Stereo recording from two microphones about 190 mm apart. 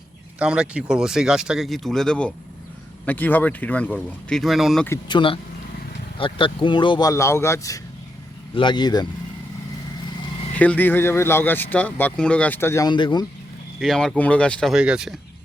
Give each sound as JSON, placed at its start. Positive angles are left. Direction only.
{"t": 0.3, "sound": "speech", "side_deg": -5}
{"t": 4.9, "sound": "speech", "side_deg": 25}
{"t": 10.5, "sound": "speech", "side_deg": 10}
{"t": 13.7, "sound": "speech", "side_deg": 0}